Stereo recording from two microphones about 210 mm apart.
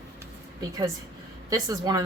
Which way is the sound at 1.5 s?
15° right (ahead or behind).